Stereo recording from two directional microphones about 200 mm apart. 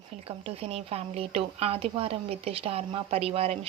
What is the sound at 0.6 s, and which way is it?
Speech, 30° right (ahead or behind).